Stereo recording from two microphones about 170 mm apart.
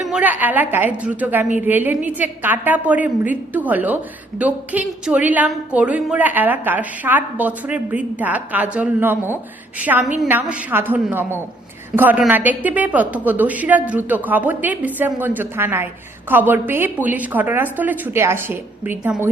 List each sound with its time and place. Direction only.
0.1 s a woman's voice: 10° right (ahead or behind)